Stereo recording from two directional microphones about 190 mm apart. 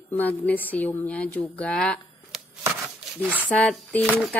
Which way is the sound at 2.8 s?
10° right (ahead or behind).